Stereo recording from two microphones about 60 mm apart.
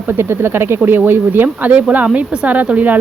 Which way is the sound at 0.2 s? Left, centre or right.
Right.